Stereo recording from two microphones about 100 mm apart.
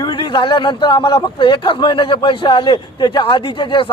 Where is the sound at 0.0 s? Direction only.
50° left (ahead or behind).